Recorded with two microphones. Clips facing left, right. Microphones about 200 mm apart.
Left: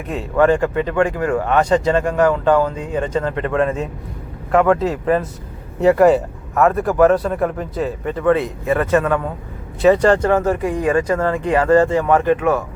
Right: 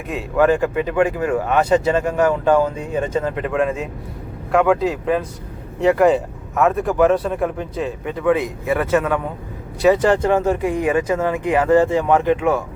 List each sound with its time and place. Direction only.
0.1 s speech: 5° right (ahead or behind)
8.2 s speech: 15° right (ahead or behind)
9.9 s speech: 15° right (ahead or behind)